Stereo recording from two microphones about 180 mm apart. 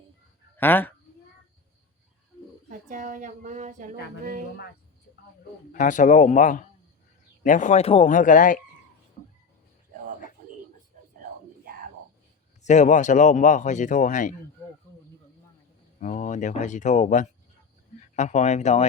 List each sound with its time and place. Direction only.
0.5 s speech: 10° left (ahead or behind)
2.6 s a woman's voice: 45° right (ahead or behind)
5.7 s speech: 45° left (ahead or behind)
12.6 s speech: 40° left (ahead or behind)
16.0 s speech: 45° left (ahead or behind)